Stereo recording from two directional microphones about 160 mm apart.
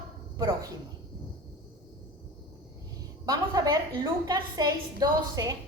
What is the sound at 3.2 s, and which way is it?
A woman's voice, 20° right (ahead or behind).